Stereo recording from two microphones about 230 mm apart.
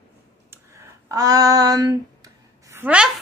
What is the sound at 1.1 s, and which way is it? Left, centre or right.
Female singing, centre.